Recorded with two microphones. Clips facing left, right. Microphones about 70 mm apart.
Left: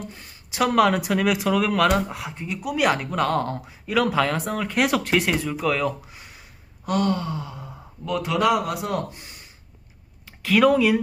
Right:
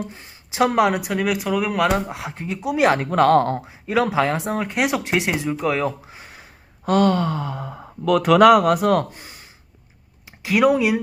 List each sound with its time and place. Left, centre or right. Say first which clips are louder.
0.1 s speech: right 2 dB; right
0.9 s speech: even; centre
1.9 s speech: right 1 dB; right
3.7 s speech: right 2 dB; right
4.7 s speech: left 2 dB; centre
5.6 s a sound: right 1 dB; right
6.8 s gasp: right 6 dB; right
7.6 s speech: right 10 dB; right
9.1 s gasp: right 3 dB; right
10.4 s speech: even; centre